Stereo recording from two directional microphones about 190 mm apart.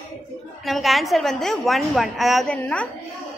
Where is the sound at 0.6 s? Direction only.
Centre (ahead or behind).